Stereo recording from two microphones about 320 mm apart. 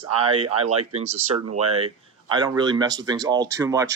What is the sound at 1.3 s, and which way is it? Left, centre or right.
Speech, right.